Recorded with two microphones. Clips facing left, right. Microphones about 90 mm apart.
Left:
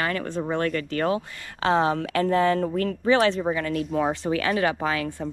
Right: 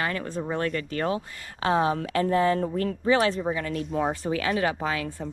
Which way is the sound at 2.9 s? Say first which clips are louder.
Left 2 dB; 60° left (ahead or behind).